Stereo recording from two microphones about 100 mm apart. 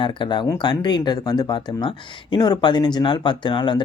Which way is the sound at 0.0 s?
50° left (ahead or behind).